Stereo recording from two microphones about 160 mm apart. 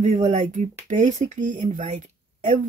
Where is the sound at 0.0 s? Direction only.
50° right (ahead or behind).